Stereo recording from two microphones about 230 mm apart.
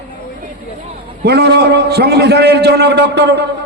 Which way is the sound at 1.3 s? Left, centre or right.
Right.